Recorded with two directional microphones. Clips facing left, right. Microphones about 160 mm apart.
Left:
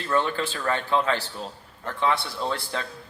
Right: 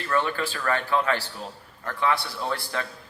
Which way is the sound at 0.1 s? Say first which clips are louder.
Left 1 dB; 20° left (ahead or behind).